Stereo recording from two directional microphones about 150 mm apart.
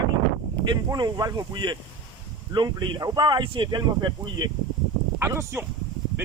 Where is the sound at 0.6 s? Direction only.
25° right (ahead or behind).